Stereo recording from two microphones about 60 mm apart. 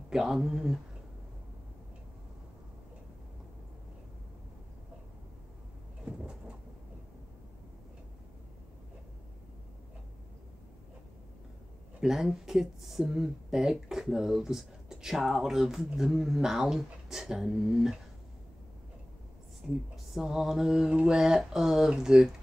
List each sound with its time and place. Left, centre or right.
0.1 s speech: centre
6.0 s cupboard open or close: centre
12.0 s speech: centre
19.6 s a woman's voice: centre